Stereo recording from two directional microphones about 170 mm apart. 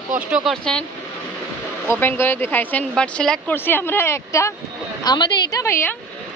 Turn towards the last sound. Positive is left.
turn(degrees=15)  # may be behind; listen again after turning